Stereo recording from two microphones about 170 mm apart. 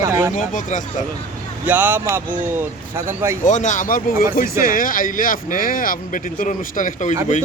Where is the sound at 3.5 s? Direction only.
45° left (ahead or behind).